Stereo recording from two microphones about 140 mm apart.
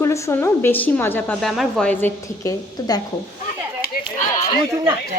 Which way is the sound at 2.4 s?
30° left (ahead or behind).